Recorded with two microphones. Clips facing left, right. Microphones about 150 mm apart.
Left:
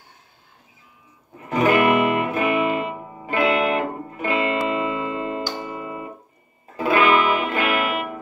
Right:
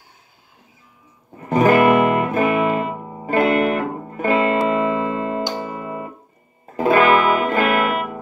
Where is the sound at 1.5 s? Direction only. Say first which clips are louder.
Right 4 dB; 40° right (ahead or behind).